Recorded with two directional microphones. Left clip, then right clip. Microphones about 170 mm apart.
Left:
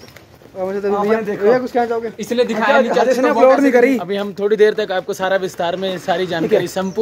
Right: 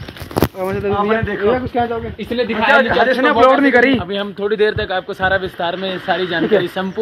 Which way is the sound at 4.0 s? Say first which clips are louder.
Left 1 dB; 35° left (ahead or behind).